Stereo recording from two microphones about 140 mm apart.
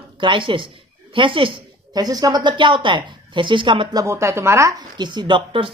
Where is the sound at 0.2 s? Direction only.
35° right (ahead or behind).